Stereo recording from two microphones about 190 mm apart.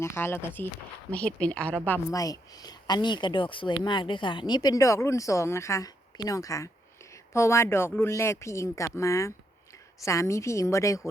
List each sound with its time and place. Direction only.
0.0 s speech: 15° left (ahead or behind)